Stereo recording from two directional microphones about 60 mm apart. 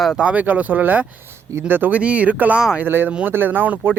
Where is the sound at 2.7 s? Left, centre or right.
Right.